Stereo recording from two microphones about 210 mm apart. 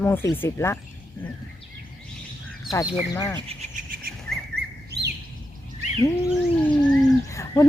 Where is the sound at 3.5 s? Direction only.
35° right (ahead or behind).